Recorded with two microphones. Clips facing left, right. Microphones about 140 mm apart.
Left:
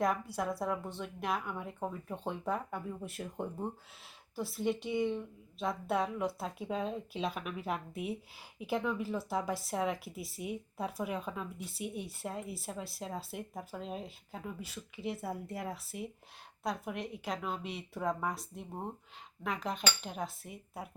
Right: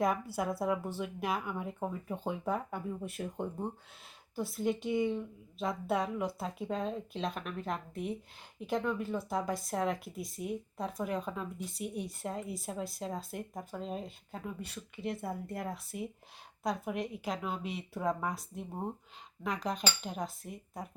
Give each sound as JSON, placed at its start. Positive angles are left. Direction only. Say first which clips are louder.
{"t": 0.3, "sound": "a woman's voice", "louder": "right 2 dB", "side_deg": 0}